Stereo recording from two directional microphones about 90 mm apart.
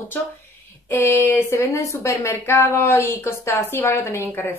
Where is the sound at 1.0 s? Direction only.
25° left (ahead or behind).